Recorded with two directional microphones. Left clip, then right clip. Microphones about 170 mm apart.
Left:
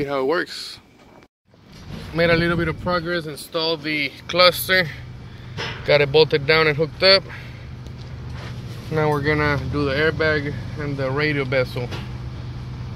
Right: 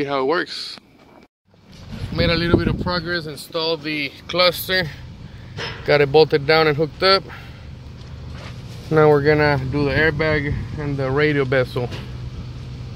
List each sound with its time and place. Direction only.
0.0 s speech: 10° right (ahead or behind)
2.1 s speech: 25° left (ahead or behind)
3.5 s speech: 5° right (ahead or behind)
5.9 s speech: 40° right (ahead or behind)
8.9 s speech: 70° right (ahead or behind); by 11.9 s 55° right (ahead or behind)